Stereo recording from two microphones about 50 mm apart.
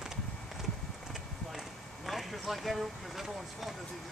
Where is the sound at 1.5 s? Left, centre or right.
Centre.